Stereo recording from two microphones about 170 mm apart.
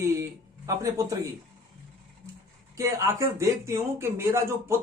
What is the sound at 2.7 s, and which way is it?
Speech, 15° right (ahead or behind).